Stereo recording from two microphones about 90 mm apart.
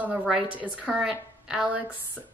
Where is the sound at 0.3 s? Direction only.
15° right (ahead or behind).